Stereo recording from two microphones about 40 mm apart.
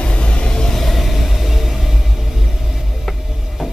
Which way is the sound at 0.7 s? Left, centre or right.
Centre.